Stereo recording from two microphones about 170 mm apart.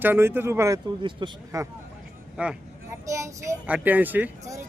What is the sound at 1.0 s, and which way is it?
Speech, 30° right (ahead or behind).